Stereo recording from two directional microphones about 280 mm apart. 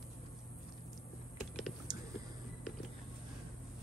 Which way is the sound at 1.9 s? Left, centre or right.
Centre.